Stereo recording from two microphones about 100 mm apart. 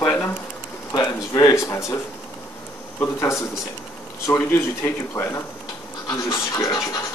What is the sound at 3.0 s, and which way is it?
Speech, 30° left (ahead or behind).